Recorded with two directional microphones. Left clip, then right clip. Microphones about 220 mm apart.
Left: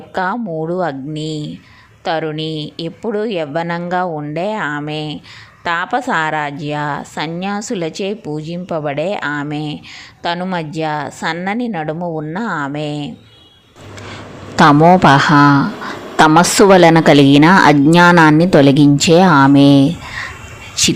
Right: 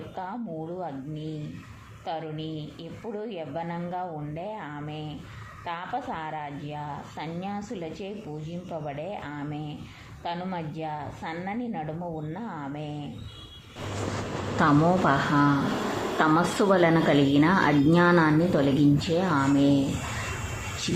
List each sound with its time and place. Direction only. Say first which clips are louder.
0.1 s a woman's voice: left 18 dB; 50° left (ahead or behind)
14.5 s a woman's voice: left 14 dB; 45° left (ahead or behind)